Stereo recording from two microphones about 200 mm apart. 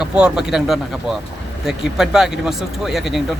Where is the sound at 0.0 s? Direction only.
5° right (ahead or behind).